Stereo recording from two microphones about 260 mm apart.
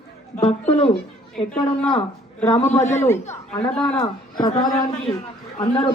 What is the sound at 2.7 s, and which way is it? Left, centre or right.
Speech, left.